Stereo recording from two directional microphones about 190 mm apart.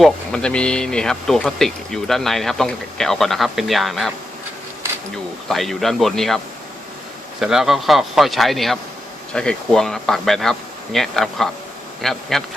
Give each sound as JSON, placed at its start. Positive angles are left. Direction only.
{"t": 0.0, "sound": "speech", "side_deg": 5}
{"t": 5.5, "sound": "speech", "side_deg": 0}